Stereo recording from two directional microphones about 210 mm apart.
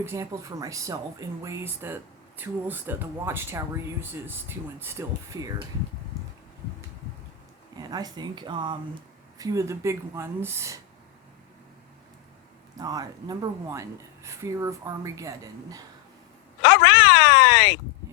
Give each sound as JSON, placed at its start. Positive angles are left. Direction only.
{"t": 0.0, "sound": "speech", "side_deg": -15}
{"t": 7.8, "sound": "speech", "side_deg": -20}
{"t": 12.7, "sound": "speech", "side_deg": -15}
{"t": 16.6, "sound": "a sound", "side_deg": 60}